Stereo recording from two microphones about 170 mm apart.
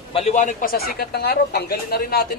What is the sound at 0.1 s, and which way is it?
Speech, 40° left (ahead or behind).